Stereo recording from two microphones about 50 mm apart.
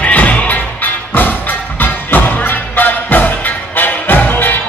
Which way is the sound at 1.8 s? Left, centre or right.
Left.